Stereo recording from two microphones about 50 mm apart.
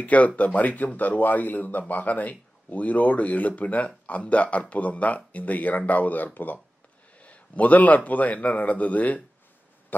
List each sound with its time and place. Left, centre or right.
0.0 s speech: left